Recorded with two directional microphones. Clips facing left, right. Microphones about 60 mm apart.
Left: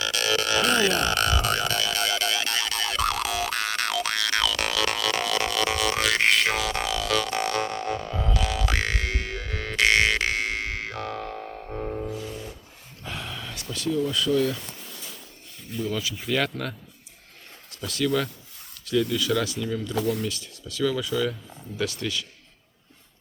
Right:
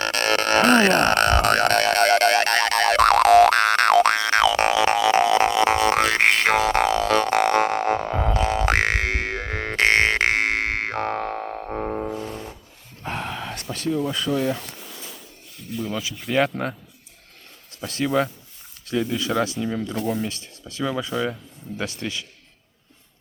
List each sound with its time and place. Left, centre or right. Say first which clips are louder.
0.0 s a sound: right 4 dB; right
4.2 s a sound: right 8 dB; right
7.3 s music: right 8 dB; right
7.6 s didgeridoo: right 7 dB; right
8.7 s music: right 6 dB; right
12.1 s music: right 3 dB; right
13.0 s a sound: right 6 dB; right
14.0 s speech: left 3 dB; right
15.8 s speech: even; centre
17.8 s speech: right 1 dB; right
19.1 s speech: right 2 dB; right
20.0 s speech: left 1 dB; left
20.2 s speech: right 1 dB; right